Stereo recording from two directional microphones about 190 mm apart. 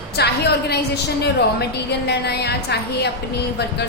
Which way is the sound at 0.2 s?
60° left (ahead or behind).